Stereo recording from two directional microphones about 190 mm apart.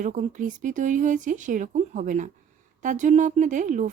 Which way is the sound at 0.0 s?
40° right (ahead or behind).